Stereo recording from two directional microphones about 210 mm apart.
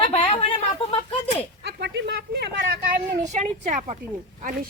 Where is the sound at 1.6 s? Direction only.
55° right (ahead or behind).